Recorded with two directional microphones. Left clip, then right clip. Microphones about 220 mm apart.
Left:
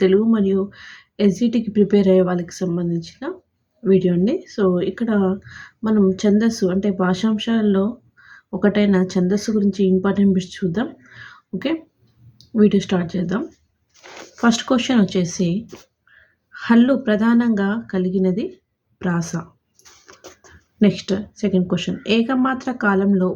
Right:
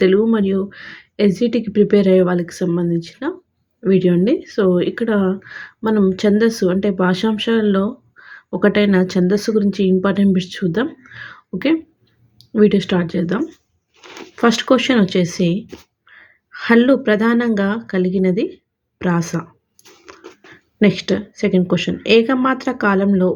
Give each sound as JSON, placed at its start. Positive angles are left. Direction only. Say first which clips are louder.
{"t": 0.0, "sound": "speech", "louder": "right 2 dB", "side_deg": -15}
{"t": 20.1, "sound": "a sound", "louder": "right 7 dB", "side_deg": -15}
{"t": 20.7, "sound": "speech", "louder": "right 3 dB", "side_deg": -15}